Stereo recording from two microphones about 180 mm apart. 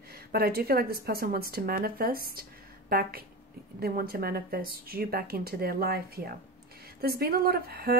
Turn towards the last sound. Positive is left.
turn(degrees=-60)  # may be behind; listen again after turning